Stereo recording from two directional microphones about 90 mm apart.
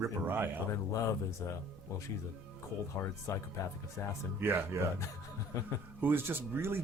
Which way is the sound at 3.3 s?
35° left (ahead or behind).